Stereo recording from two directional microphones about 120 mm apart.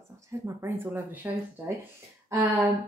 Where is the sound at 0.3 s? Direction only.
20° right (ahead or behind).